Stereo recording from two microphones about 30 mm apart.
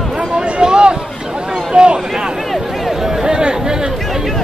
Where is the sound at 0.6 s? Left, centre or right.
Right.